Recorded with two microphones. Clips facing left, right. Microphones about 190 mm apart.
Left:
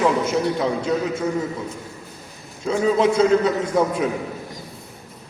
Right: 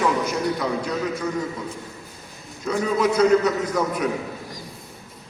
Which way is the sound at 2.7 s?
25° left (ahead or behind).